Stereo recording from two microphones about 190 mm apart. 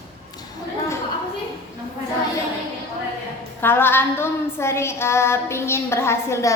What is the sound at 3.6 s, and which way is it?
A woman's voice, 10° left (ahead or behind).